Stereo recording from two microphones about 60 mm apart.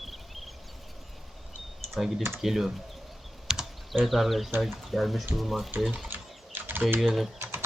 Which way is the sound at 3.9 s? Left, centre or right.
Centre.